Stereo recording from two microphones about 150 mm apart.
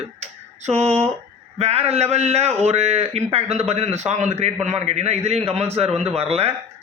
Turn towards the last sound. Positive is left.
turn(degrees=-40)  # may be behind; listen again after turning